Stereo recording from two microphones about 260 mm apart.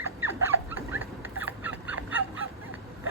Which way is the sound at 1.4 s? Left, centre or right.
Centre.